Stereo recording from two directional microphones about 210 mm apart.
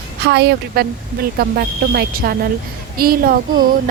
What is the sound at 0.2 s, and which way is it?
Speech, 55° right (ahead or behind).